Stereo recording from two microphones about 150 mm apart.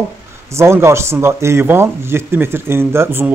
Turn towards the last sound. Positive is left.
turn(degrees=-15)  # may be behind; listen again after turning